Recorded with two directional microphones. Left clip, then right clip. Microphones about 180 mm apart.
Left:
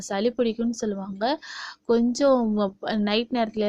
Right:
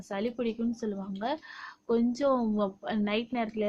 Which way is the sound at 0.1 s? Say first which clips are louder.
Left 8 dB; 40° left (ahead or behind).